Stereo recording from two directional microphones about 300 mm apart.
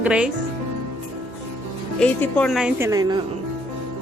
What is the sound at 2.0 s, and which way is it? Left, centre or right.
A woman's voice, centre.